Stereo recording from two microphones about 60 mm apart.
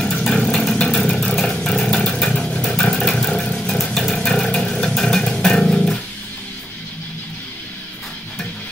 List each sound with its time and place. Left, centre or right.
0.2 s vehicle: centre